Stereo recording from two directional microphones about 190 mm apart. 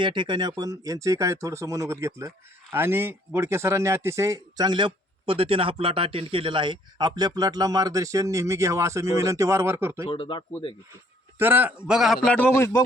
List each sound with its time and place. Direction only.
0.0 s speech: 25° right (ahead or behind)
10.1 s speech: 25° left (ahead or behind)
11.3 s a man's voice: 10° right (ahead or behind); by 12.8 s 15° left (ahead or behind)